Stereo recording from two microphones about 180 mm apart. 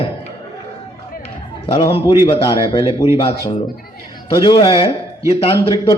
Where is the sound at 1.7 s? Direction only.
30° left (ahead or behind).